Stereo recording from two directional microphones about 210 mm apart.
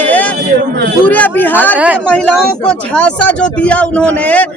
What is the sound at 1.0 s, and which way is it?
Speech, 5° left (ahead or behind).